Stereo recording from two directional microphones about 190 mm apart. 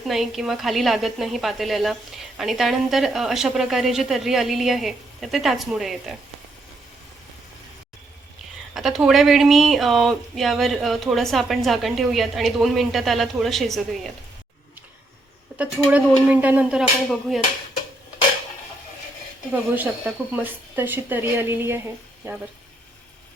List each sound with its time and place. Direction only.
0.0 s speech: centre (ahead or behind)
8.7 s speech: centre (ahead or behind)
15.9 s a woman's voice: 5° right (ahead or behind)
19.5 s a woman's voice: 5° right (ahead or behind)